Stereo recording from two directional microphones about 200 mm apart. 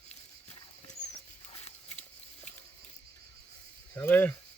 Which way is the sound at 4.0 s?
10° left (ahead or behind).